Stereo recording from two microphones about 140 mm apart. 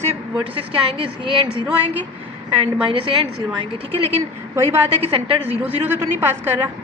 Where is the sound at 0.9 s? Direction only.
40° right (ahead or behind).